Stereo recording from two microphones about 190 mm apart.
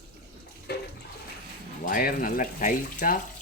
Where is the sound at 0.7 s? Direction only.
60° left (ahead or behind).